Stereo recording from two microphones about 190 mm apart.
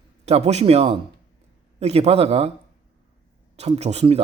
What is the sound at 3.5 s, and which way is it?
Speech, 35° right (ahead or behind).